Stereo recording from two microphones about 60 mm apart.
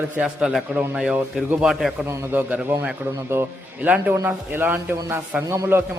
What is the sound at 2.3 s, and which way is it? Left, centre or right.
Speech, right.